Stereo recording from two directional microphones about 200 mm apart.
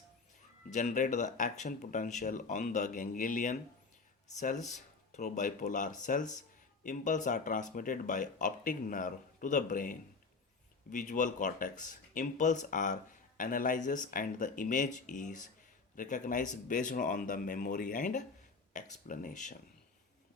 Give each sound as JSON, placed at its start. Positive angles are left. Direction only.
{"t": 0.7, "sound": "speech", "side_deg": 40}